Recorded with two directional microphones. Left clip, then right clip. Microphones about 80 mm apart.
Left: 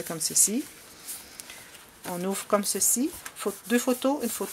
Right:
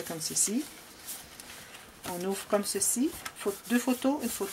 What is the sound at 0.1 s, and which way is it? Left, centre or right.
Speech, left.